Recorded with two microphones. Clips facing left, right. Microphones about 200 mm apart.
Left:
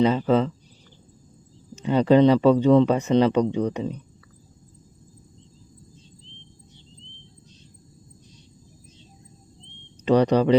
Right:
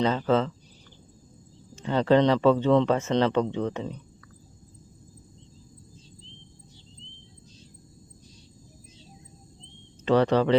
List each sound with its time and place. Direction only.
0.0 s speech: 10° left (ahead or behind)
1.7 s speech: 15° left (ahead or behind)
10.1 s speech: 15° left (ahead or behind)